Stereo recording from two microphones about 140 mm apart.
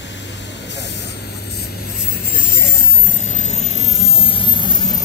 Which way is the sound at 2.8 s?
60° left (ahead or behind).